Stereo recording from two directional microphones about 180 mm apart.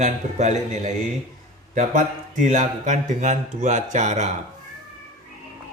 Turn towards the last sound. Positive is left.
turn(degrees=-40)  # may be behind; listen again after turning